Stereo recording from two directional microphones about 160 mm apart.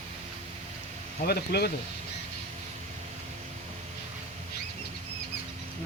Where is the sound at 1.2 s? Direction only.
75° left (ahead or behind).